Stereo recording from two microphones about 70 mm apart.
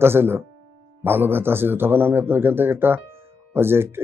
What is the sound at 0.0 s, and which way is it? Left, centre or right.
Speech, right.